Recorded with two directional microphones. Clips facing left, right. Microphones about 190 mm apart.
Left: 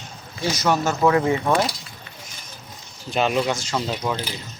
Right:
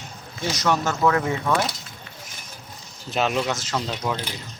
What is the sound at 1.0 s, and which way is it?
Speech, 20° left (ahead or behind).